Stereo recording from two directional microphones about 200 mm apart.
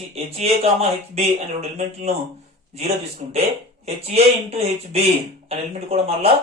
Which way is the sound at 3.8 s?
30° right (ahead or behind).